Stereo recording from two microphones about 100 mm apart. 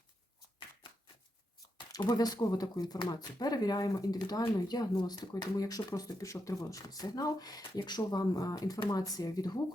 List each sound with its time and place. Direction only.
2.0 s speech: 40° left (ahead or behind)